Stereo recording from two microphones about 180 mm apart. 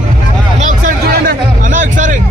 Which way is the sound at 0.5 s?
45° right (ahead or behind).